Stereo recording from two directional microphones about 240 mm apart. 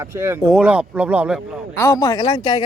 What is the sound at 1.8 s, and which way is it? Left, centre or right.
Speech, centre.